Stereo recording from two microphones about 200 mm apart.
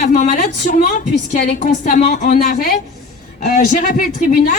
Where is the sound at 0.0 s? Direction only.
35° left (ahead or behind).